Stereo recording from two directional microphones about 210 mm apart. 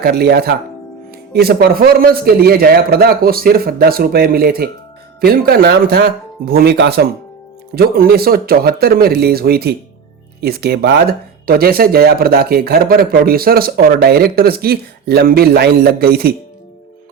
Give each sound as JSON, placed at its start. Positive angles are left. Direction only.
{"t": 0.0, "sound": "speech", "side_deg": -50}